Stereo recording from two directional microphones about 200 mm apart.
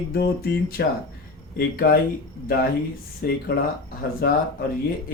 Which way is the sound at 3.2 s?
45° left (ahead or behind).